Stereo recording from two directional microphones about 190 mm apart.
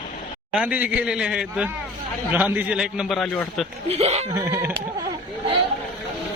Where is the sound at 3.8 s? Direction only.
35° right (ahead or behind).